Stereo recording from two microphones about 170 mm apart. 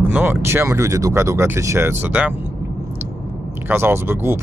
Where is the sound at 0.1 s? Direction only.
10° right (ahead or behind).